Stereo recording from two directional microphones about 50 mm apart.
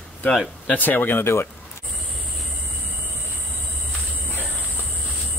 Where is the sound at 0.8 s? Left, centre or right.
Left.